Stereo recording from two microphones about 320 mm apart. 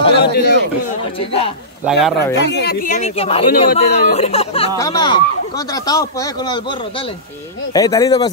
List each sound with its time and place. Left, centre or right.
0.3 s a sound: left
1.9 s speech: centre
2.3 s speech: left; by 6.6 s centre
7.7 s speech: centre